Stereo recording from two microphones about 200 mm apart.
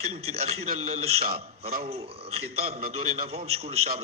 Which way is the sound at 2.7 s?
45° right (ahead or behind).